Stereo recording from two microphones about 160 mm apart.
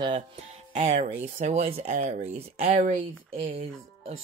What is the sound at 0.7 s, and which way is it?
Speech, 45° right (ahead or behind).